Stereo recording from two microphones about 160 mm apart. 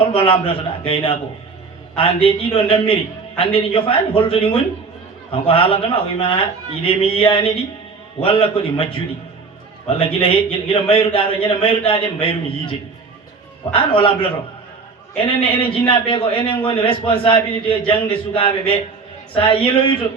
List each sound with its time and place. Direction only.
0.0 s a man's voice: 35° left (ahead or behind)
10.0 s a man's voice: 35° left (ahead or behind)
13.7 s a man's voice: 35° left (ahead or behind)
15.3 s a man's voice: 35° left (ahead or behind)